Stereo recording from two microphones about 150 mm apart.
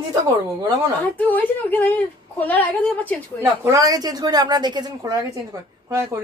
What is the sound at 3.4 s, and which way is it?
Speech, 20° right (ahead or behind).